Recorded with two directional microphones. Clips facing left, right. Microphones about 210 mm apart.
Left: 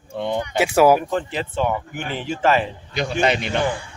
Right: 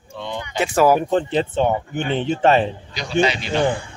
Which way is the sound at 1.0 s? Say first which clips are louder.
Right 5 dB; 30° right (ahead or behind).